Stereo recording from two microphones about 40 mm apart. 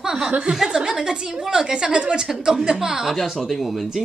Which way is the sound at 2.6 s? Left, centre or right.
Centre.